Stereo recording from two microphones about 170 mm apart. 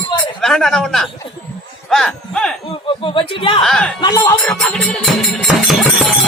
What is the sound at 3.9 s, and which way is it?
Speech, 25° left (ahead or behind).